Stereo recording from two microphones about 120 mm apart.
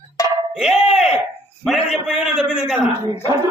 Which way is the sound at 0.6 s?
5° right (ahead or behind).